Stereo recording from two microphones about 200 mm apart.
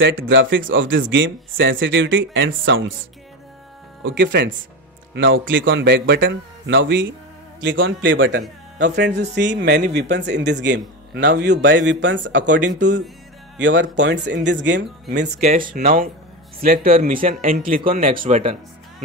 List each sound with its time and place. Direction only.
0.0 s speech: 70° right (ahead or behind)
4.0 s a man's voice: 65° right (ahead or behind)
8.4 s a man's voice: 60° right (ahead or behind)
13.6 s a man's voice: 65° right (ahead or behind)
15.4 s speech: 45° right (ahead or behind)